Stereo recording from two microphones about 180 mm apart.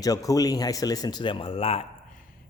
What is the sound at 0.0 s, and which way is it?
Speech, 20° left (ahead or behind).